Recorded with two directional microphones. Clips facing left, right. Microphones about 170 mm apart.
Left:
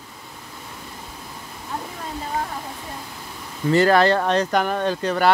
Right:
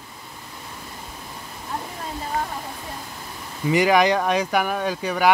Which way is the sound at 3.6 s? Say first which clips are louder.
Left 2 dB; 15° right (ahead or behind).